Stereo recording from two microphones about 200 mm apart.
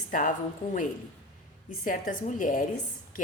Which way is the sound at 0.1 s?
40° left (ahead or behind).